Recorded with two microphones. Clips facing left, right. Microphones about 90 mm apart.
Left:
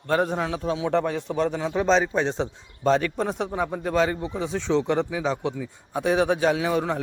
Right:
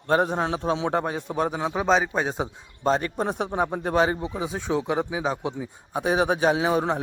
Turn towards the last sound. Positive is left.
turn(degrees=-25)  # may be behind; listen again after turning